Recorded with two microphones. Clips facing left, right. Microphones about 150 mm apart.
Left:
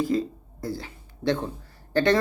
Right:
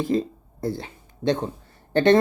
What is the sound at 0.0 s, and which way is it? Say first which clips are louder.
Speech: right 1 dB; 25° right (ahead or behind).